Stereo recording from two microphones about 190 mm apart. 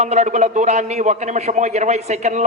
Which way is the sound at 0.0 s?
35° right (ahead or behind).